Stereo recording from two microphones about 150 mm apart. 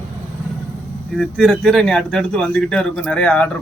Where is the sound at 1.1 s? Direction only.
5° left (ahead or behind).